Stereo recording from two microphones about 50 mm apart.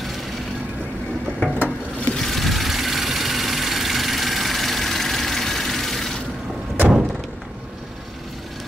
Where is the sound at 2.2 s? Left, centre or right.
Centre.